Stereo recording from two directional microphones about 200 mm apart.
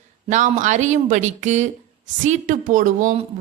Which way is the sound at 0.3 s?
40° right (ahead or behind).